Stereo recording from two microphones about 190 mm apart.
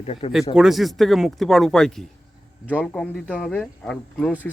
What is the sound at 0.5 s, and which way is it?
Speech, centre (ahead or behind).